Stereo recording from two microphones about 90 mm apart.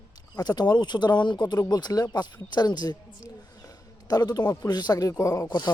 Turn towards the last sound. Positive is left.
turn(degrees=45)  # may be behind; listen again after turning